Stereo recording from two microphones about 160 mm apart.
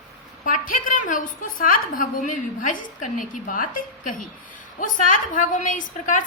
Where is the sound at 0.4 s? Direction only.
60° left (ahead or behind).